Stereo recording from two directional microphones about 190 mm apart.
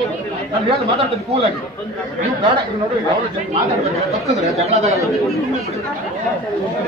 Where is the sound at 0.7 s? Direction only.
30° right (ahead or behind).